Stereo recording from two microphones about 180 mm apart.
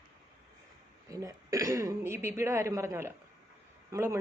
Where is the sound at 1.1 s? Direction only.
20° right (ahead or behind).